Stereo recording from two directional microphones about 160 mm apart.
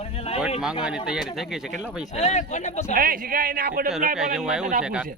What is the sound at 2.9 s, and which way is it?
Speech, 65° right (ahead or behind).